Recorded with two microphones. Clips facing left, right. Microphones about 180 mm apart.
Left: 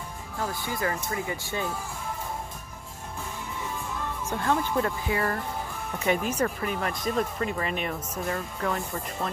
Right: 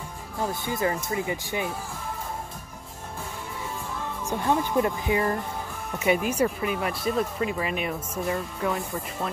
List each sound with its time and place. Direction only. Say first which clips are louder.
0.4 s speech: right 3 dB; 20° right (ahead or behind)
4.3 s speech: right 2 dB; 15° right (ahead or behind)